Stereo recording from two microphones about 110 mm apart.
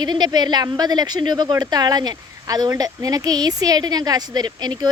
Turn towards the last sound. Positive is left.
turn(degrees=-40)  # may be behind; listen again after turning